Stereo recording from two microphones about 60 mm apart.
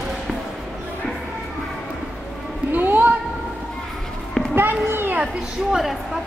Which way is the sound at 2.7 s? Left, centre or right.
Right.